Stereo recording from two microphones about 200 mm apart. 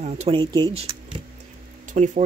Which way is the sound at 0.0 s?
35° right (ahead or behind).